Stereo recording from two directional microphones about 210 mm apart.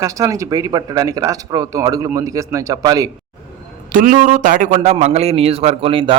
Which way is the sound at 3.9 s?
40° right (ahead or behind).